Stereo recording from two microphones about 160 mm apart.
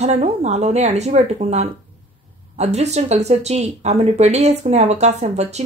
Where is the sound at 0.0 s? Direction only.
45° right (ahead or behind).